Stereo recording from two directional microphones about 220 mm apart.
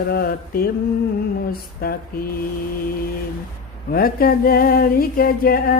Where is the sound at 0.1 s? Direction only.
45° left (ahead or behind).